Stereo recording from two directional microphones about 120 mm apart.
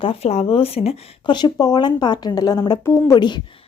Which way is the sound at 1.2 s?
40° left (ahead or behind).